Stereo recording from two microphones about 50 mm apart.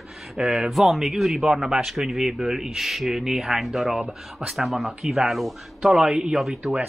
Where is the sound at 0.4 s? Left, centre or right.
Centre.